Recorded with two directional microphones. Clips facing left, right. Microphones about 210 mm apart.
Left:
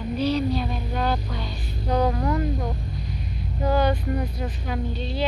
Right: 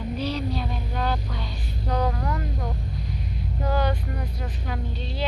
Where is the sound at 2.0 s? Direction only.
15° left (ahead or behind).